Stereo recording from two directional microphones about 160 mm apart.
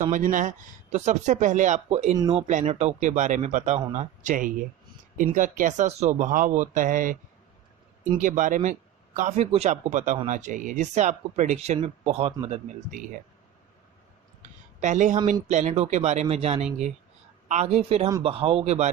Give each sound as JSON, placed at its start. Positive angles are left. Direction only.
{"t": 0.1, "sound": "speech", "side_deg": -55}
{"t": 8.2, "sound": "speech", "side_deg": -55}
{"t": 12.5, "sound": "speech", "side_deg": -55}
{"t": 14.8, "sound": "speech", "side_deg": -50}